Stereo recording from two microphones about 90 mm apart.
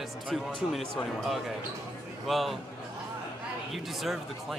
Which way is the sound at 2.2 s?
Centre (ahead or behind).